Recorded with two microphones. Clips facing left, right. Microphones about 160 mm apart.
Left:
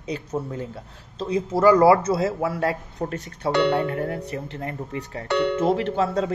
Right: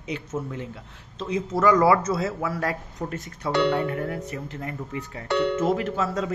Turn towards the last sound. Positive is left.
turn(degrees=30)  # may be behind; listen again after turning